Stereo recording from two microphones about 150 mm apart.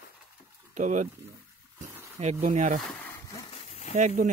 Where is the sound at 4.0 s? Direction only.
55° right (ahead or behind).